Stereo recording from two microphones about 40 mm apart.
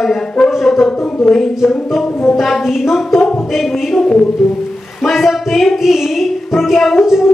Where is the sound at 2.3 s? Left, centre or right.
Centre.